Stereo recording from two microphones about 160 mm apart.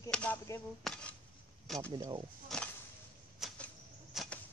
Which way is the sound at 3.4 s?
Centre (ahead or behind).